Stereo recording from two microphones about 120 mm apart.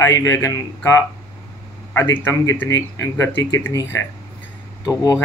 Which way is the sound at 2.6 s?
20° left (ahead or behind).